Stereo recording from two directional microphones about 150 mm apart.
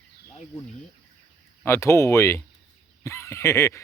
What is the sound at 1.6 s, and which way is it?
Speech, 20° left (ahead or behind).